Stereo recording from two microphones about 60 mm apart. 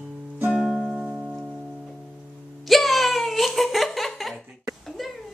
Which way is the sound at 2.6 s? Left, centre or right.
Centre.